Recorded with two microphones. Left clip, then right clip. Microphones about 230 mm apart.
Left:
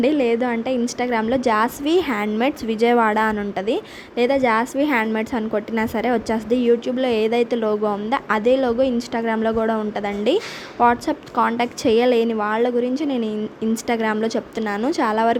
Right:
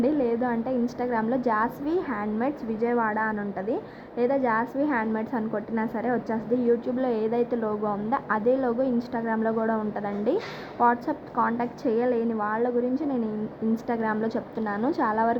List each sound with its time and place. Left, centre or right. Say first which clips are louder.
0.0 s a woman's voice: left 6 dB; left
13.8 s a woman's voice: left 7 dB; left